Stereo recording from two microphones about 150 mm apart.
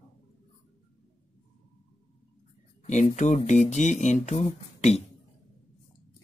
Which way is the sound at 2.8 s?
50° left (ahead or behind).